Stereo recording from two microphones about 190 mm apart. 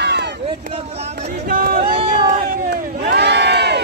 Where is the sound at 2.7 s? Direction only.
65° right (ahead or behind).